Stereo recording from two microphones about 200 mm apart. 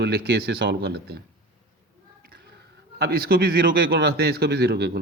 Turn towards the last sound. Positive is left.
turn(degrees=-50)  # may be behind; listen again after turning